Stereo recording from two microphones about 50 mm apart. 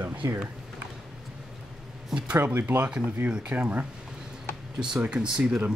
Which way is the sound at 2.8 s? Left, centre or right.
Centre.